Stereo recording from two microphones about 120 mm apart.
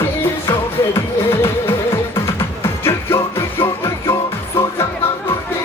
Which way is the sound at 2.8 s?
20° left (ahead or behind).